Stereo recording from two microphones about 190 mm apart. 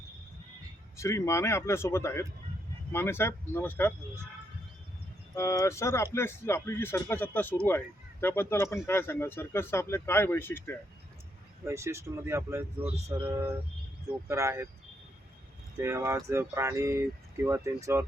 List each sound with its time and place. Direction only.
0.9 s speech: 15° left (ahead or behind)
5.3 s speech: 15° left (ahead or behind)
11.6 s speech: 15° right (ahead or behind)
15.8 s speech: 15° right (ahead or behind)